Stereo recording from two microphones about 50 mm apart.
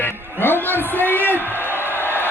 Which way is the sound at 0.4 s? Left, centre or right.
Left.